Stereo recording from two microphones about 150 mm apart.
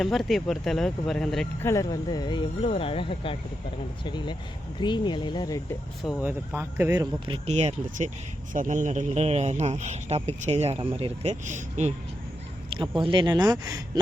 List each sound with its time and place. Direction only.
0.0 s speech: centre (ahead or behind)
1.6 s speech: 20° left (ahead or behind)
6.2 s speech: 15° right (ahead or behind)
7.4 s speech: 45° right (ahead or behind)
13.0 s speech: 30° right (ahead or behind)